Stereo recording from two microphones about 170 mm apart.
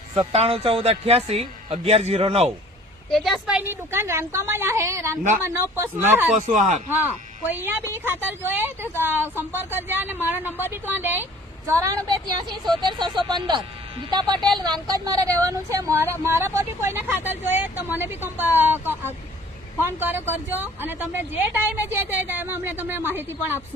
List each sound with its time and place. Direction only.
0.1 s speech: 35° right (ahead or behind)
3.1 s a woman's voice: centre (ahead or behind)
6.3 s speech: 45° right (ahead or behind)
6.8 s speech: 10° right (ahead or behind)